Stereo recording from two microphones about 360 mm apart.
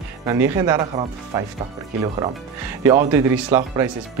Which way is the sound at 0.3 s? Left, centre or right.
Centre.